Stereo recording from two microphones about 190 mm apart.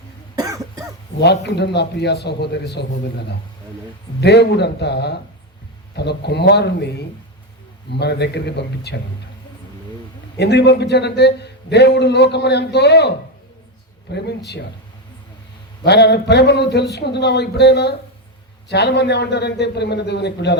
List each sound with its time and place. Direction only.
0.3 s cough: 20° right (ahead or behind)
1.2 s a man's voice: 60° left (ahead or behind)
4.2 s a man's voice: 60° left (ahead or behind)
7.9 s a man's voice: 60° left (ahead or behind)
10.3 s a man's voice: 65° left (ahead or behind)
15.8 s a man's voice: 60° left (ahead or behind)